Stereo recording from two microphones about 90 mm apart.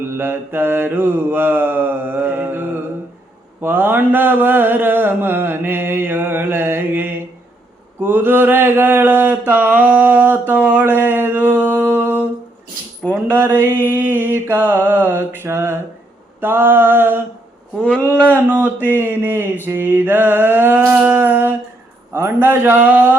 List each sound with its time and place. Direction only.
0.0 s mantra: 25° right (ahead or behind)
9.7 s a sound: 15° right (ahead or behind)
10.7 s mantra: 20° right (ahead or behind)
13.3 s mantra: 20° right (ahead or behind)